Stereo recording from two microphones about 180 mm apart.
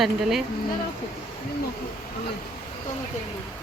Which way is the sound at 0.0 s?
Centre (ahead or behind).